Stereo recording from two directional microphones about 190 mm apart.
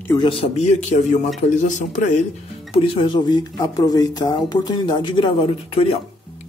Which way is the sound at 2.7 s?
30° left (ahead or behind).